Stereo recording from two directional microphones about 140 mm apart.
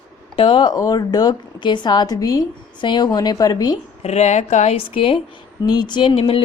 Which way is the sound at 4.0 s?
55° left (ahead or behind).